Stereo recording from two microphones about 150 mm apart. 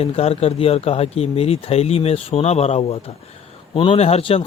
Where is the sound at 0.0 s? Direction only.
40° left (ahead or behind).